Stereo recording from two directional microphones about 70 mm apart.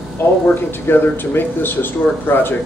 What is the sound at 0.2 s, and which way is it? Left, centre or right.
Speech, left.